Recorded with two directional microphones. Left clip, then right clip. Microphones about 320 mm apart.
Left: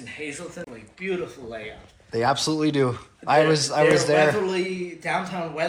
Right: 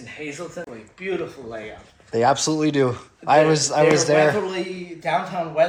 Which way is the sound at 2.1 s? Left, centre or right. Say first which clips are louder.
Right 4 dB; centre.